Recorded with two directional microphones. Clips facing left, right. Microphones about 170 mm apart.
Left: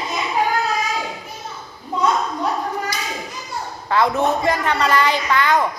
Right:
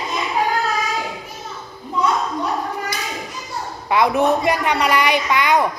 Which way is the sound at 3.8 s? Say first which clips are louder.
Right 2 dB; 15° right (ahead or behind).